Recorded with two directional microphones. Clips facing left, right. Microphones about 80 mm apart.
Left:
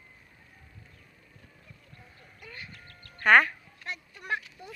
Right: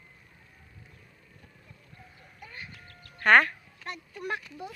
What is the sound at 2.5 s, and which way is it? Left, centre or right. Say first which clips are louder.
Sheep: left 1 dB; centre.